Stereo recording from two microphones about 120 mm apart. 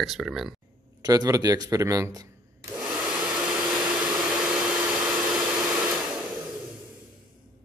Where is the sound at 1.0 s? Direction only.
30° right (ahead or behind).